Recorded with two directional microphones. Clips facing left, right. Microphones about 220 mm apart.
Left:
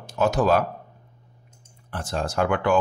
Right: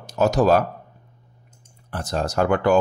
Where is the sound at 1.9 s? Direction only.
40° right (ahead or behind).